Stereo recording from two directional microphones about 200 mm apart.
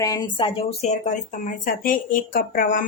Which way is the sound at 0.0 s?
20° left (ahead or behind).